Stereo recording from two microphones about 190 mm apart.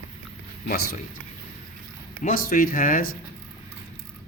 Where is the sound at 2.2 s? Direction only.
50° left (ahead or behind).